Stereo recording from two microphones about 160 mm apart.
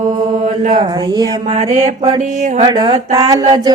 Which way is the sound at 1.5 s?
45° right (ahead or behind).